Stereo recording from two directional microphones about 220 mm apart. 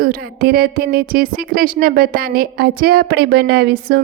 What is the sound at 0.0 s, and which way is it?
A woman's voice, 40° right (ahead or behind).